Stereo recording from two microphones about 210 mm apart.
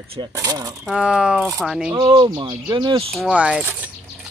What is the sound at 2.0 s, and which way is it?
Speech, 20° right (ahead or behind).